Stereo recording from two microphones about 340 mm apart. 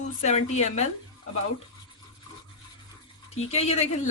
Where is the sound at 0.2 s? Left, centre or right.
Centre.